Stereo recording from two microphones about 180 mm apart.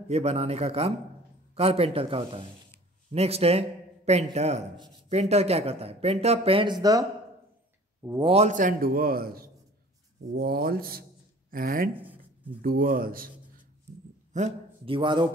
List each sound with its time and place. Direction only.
0.1 s a man's voice: 35° right (ahead or behind); by 8.3 s 15° right (ahead or behind)
8.3 s a man's voice: 40° right (ahead or behind)
11.9 s speech: 10° right (ahead or behind)
12.6 s speech: 55° right (ahead or behind)
14.3 s a sound: 40° right (ahead or behind)
15.0 s speech: 25° right (ahead or behind)